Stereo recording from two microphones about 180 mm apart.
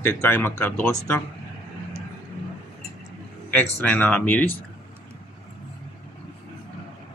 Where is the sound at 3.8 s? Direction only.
10° left (ahead or behind).